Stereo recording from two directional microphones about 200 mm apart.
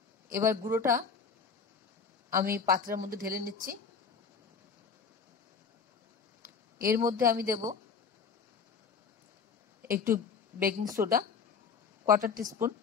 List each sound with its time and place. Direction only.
0.3 s speech: 15° right (ahead or behind)
2.3 s speech: 45° right (ahead or behind)
6.9 s speech: 20° right (ahead or behind)
9.8 s speech: 45° right (ahead or behind)